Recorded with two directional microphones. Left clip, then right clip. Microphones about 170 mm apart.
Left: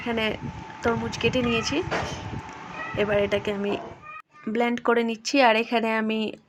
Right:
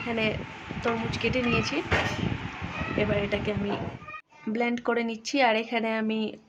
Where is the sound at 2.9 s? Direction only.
25° left (ahead or behind).